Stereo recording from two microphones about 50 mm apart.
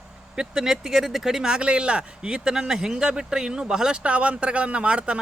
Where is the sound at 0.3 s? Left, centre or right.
Centre.